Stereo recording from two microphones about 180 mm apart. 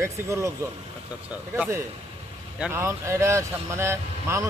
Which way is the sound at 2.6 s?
15° right (ahead or behind).